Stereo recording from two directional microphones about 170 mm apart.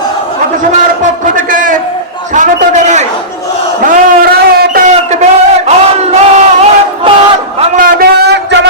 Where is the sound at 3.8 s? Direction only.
60° right (ahead or behind).